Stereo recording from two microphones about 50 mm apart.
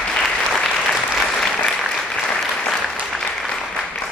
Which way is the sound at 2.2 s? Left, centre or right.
Centre.